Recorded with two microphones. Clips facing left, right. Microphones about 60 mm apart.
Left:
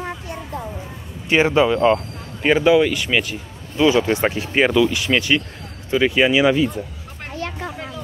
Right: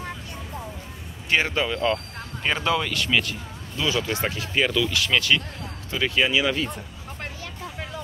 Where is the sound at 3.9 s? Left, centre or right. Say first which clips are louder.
Left 8 dB; left.